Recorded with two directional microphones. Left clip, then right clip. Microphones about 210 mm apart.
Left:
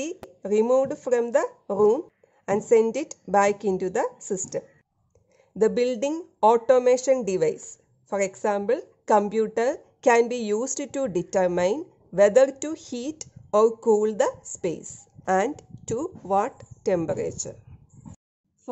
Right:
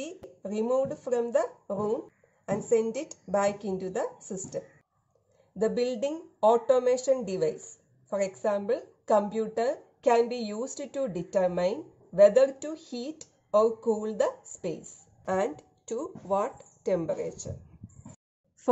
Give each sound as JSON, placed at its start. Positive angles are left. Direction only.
{"t": 0.4, "sound": "a woman's voice", "side_deg": 50}